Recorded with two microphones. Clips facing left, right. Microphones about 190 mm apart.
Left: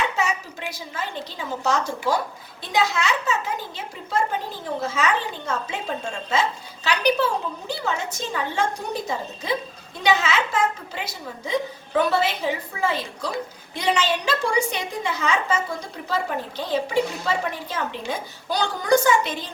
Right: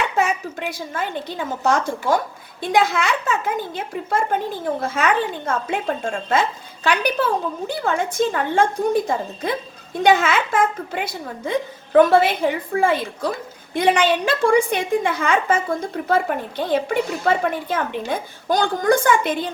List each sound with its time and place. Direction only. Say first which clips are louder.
0.2 s a woman's voice: right 5 dB; 55° right (ahead or behind)